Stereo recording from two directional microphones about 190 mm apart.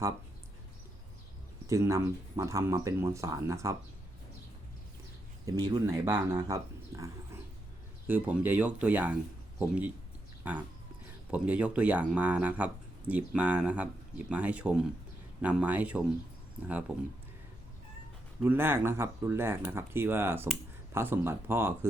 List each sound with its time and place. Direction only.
1.6 s speech: 15° right (ahead or behind)
5.5 s speech: 20° right (ahead or behind)
18.4 s speech: 10° right (ahead or behind)